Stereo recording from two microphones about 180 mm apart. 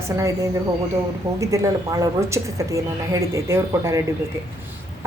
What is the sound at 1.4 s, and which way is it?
A woman's voice, 15° right (ahead or behind).